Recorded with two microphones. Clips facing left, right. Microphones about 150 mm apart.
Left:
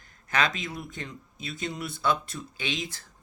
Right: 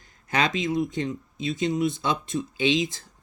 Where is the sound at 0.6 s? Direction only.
20° right (ahead or behind).